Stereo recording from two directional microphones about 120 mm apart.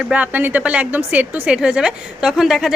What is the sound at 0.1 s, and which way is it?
A woman's voice, 15° right (ahead or behind).